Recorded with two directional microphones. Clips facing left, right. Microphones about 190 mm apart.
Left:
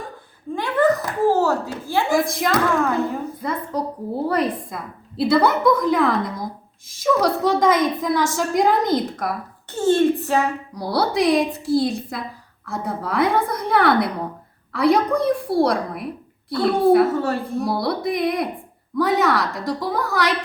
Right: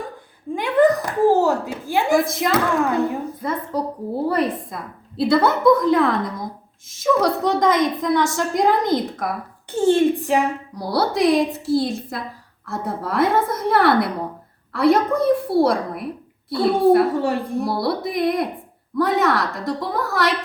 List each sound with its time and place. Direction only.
0.5 s a sound: 15° right (ahead or behind)
2.1 s a woman's voice: centre (ahead or behind)
2.8 s a woman's voice: 15° right (ahead or behind)
3.4 s a woman's voice: centre (ahead or behind)
9.8 s a woman's voice: 15° right (ahead or behind)
10.8 s a woman's voice: centre (ahead or behind)
17.1 s a woman's voice: 15° right (ahead or behind)
17.6 s a woman's voice: centre (ahead or behind)